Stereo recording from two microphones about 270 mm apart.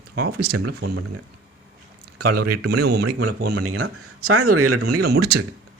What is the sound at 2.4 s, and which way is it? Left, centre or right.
Speech, right.